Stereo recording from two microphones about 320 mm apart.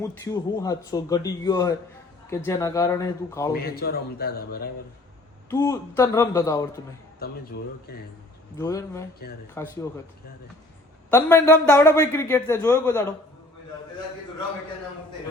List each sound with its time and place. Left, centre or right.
0.0 s speech: centre
3.5 s a man's voice: left
5.5 s speech: centre
8.5 s speech: centre
11.1 s speech: centre